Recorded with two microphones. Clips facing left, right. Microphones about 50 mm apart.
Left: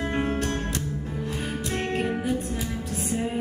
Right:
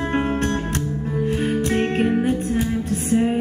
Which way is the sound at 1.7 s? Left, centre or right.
Right.